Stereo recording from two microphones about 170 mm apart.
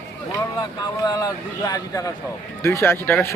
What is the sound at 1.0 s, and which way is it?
A man's voice, 20° left (ahead or behind).